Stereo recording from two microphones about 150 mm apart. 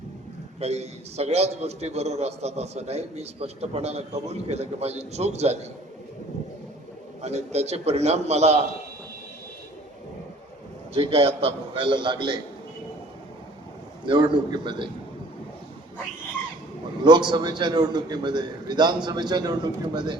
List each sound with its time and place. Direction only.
0.6 s a man's voice: 45° right (ahead or behind)
7.2 s a man's voice: 45° right (ahead or behind)
10.9 s a man's voice: 40° right (ahead or behind)
14.0 s a man's voice: 35° right (ahead or behind)
17.0 s a man's voice: 30° right (ahead or behind)